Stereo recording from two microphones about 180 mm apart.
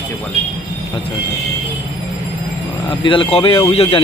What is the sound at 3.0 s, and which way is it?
Speech, 30° left (ahead or behind).